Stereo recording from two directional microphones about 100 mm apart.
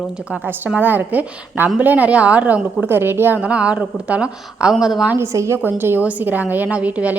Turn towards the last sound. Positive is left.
turn(degrees=-15)  # may be behind; listen again after turning